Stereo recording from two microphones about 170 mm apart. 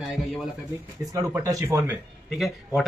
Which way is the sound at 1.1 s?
20° right (ahead or behind).